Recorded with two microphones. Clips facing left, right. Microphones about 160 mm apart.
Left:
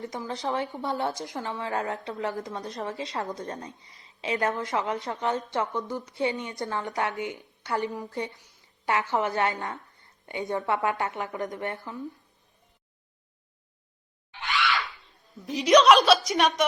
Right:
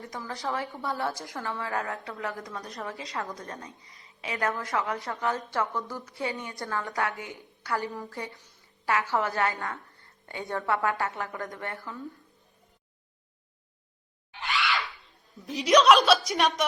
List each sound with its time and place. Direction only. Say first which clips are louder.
0.0 s a woman's voice: left 3 dB; 20° left (ahead or behind)
15.4 s a woman's voice: left 2 dB; centre (ahead or behind)